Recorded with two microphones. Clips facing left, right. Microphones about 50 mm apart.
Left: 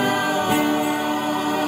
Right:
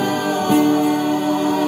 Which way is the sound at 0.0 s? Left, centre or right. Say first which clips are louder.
Right 1 dB; centre.